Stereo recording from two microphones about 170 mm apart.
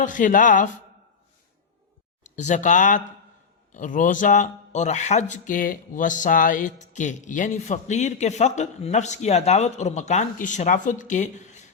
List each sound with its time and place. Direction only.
0.0 s speech: 50° left (ahead or behind)
2.3 s speech: 45° left (ahead or behind)